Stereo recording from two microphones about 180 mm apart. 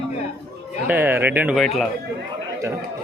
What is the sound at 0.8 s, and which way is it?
Speech, 10° right (ahead or behind).